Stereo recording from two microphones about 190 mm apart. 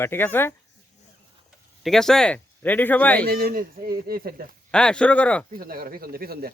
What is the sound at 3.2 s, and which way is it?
Speech, 50° right (ahead or behind).